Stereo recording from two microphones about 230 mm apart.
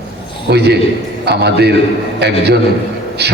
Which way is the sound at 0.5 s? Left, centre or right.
Right.